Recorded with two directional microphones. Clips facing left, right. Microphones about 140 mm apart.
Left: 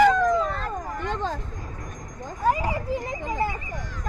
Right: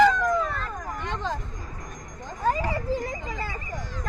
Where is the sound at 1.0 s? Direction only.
50° left (ahead or behind).